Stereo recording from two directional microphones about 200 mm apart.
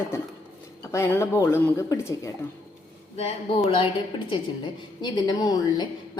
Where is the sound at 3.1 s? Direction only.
30° left (ahead or behind).